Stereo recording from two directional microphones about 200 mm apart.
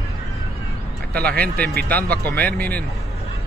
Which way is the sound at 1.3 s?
50° right (ahead or behind).